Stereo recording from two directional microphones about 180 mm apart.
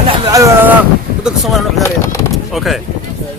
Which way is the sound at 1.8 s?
15° left (ahead or behind).